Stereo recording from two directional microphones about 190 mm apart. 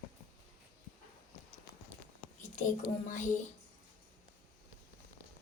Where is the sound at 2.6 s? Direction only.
40° left (ahead or behind).